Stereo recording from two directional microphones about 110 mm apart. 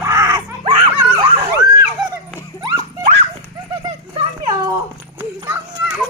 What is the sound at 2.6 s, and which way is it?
Horse, 35° right (ahead or behind).